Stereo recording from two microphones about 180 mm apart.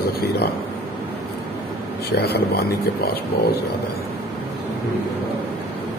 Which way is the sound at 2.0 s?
65° left (ahead or behind).